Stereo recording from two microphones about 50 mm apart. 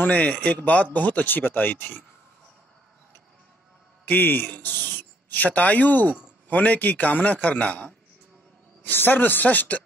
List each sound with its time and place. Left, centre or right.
0.0 s speech: left
4.0 s a man's voice: left
8.8 s speech: left